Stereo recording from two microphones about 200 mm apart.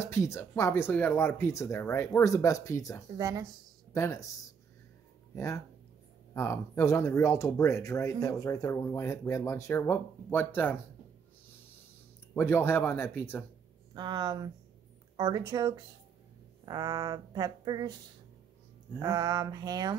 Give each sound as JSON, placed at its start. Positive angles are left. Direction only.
{"t": 0.0, "sound": "speech", "side_deg": 15}
{"t": 3.2, "sound": "speech", "side_deg": -15}
{"t": 3.9, "sound": "speech", "side_deg": 15}
{"t": 5.3, "sound": "speech", "side_deg": 15}
{"t": 12.4, "sound": "speech", "side_deg": 10}
{"t": 13.9, "sound": "speech", "side_deg": -20}
{"t": 18.9, "sound": "speech", "side_deg": -20}